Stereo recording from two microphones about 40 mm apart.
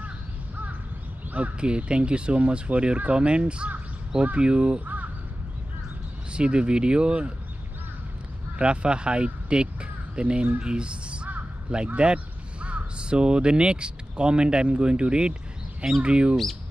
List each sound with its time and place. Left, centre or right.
1.3 s speech: right
1.7 s speech: right
4.8 s crow: right
6.3 s speech: right
8.5 s speech: right